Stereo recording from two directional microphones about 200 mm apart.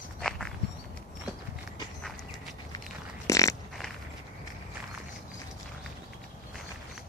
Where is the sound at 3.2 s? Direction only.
15° left (ahead or behind).